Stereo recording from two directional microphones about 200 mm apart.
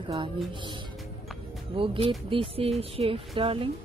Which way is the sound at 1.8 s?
25° right (ahead or behind).